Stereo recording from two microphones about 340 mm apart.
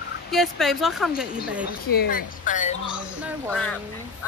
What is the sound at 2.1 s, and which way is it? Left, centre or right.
Speech, left.